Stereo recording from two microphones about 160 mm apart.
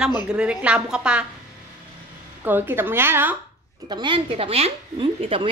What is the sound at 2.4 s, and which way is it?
Speech, 10° right (ahead or behind).